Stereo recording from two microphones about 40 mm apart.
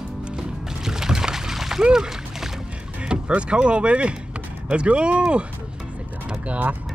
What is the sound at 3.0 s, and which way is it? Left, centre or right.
Speech, right.